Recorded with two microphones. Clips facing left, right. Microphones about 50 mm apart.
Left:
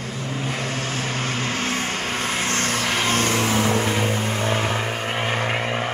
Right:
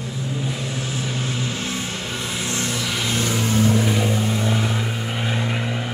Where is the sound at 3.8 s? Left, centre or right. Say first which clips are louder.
Right 1 dB; left.